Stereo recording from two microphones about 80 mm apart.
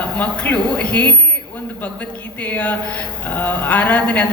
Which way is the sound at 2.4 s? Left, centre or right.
Centre.